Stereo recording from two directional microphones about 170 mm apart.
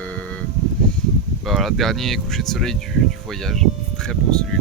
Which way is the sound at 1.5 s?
Centre (ahead or behind).